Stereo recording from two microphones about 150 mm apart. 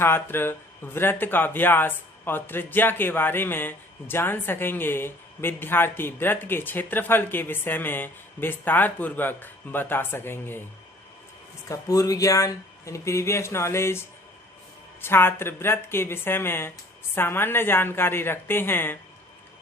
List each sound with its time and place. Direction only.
0.0 s speech: 15° left (ahead or behind)
11.7 s speech: 25° left (ahead or behind)